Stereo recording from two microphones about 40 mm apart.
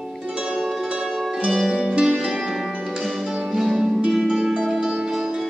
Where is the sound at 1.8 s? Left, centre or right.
Centre.